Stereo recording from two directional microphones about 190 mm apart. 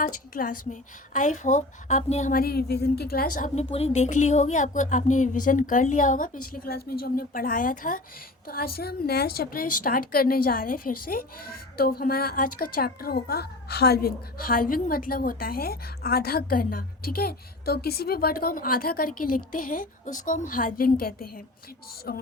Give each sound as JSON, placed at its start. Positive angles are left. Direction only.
{"t": 0.0, "sound": "a woman's voice", "side_deg": 45}